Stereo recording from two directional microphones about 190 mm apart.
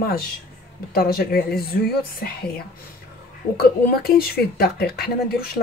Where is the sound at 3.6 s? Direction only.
55° left (ahead or behind).